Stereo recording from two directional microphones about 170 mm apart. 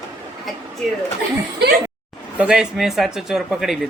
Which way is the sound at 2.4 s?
5° right (ahead or behind).